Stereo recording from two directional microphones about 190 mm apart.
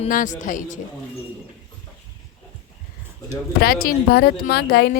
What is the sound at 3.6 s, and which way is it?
Speech, 50° left (ahead or behind).